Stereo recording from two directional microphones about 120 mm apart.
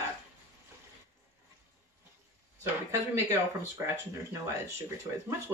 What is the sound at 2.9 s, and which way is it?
Speech, 25° right (ahead or behind).